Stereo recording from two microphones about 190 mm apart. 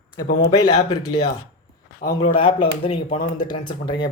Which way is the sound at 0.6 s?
20° left (ahead or behind).